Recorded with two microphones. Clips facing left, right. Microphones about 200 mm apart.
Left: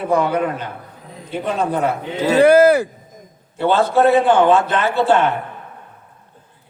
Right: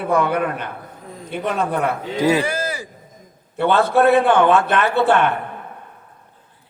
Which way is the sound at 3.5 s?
60° right (ahead or behind).